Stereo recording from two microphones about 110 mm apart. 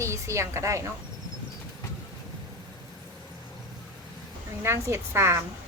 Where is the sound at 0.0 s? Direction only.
25° right (ahead or behind).